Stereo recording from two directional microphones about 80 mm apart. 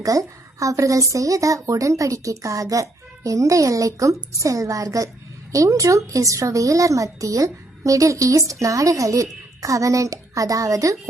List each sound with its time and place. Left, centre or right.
0.0 s a woman's voice: right